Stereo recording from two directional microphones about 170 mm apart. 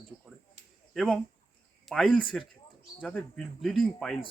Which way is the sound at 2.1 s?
30° left (ahead or behind).